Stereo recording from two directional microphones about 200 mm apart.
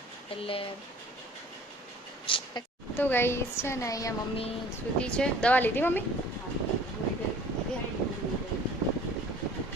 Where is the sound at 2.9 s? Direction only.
10° left (ahead or behind).